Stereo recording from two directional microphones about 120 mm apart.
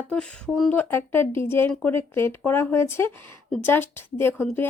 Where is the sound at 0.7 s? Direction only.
20° left (ahead or behind).